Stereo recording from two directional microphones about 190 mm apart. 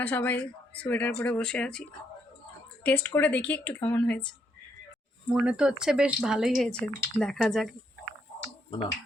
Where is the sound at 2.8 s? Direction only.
10° left (ahead or behind).